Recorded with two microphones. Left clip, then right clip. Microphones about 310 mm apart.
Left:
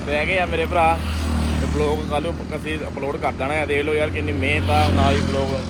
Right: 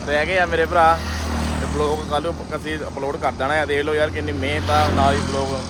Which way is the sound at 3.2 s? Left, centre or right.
Right.